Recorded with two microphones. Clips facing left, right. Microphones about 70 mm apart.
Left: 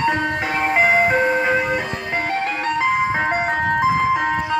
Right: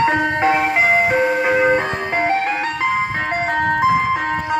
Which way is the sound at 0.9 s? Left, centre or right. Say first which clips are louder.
Right 1 dB; centre.